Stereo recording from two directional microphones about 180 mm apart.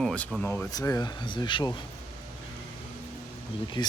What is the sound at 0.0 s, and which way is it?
Speech, 5° left (ahead or behind).